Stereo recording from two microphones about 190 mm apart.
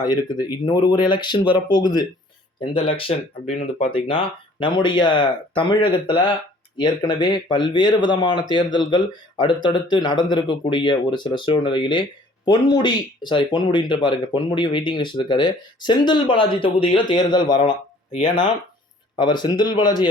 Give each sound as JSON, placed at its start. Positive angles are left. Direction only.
{"t": 0.0, "sound": "speech", "side_deg": 20}
{"t": 2.6, "sound": "speech", "side_deg": 25}